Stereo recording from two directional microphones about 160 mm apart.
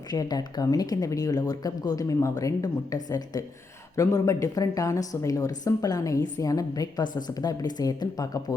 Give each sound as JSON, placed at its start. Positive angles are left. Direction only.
{"t": 0.1, "sound": "speech", "side_deg": 25}